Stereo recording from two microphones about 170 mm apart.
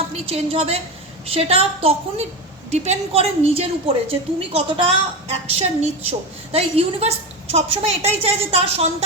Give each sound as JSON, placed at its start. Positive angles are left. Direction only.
{"t": 0.1, "sound": "a woman's voice", "side_deg": -35}